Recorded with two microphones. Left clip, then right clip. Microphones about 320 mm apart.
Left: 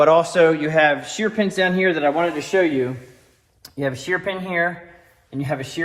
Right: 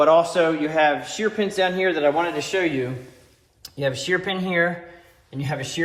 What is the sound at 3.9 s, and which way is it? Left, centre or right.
Speech, centre.